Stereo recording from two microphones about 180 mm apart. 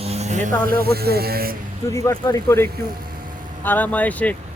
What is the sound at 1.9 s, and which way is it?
Speech, 15° left (ahead or behind).